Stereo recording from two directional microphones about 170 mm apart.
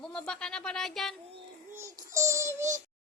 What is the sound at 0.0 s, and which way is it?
Speech, 5° left (ahead or behind).